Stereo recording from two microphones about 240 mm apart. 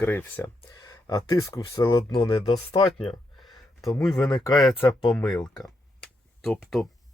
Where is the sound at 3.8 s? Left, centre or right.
Centre.